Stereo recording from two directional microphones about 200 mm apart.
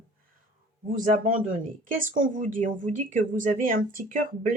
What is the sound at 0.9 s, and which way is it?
Speech, 40° right (ahead or behind).